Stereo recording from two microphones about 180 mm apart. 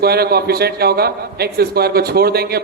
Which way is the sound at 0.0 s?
60° right (ahead or behind).